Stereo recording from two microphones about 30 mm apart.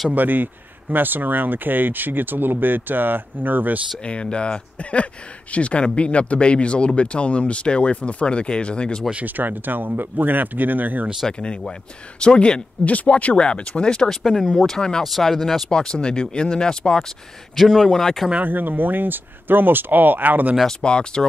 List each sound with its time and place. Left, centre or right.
0.1 s speech: right
4.0 s speech: left
9.2 s speech: right
12.4 s speech: left
12.8 s speech: left
13.1 s speech: left
14.2 s speech: centre
14.8 s speech: left
17.6 s speech: centre
18.4 s speech: right
20.8 s speech: left